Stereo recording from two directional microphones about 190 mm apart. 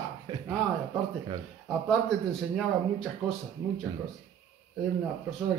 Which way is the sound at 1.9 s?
Centre (ahead or behind).